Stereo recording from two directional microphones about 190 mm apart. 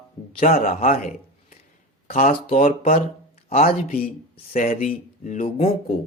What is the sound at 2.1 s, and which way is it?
Speech, 35° left (ahead or behind).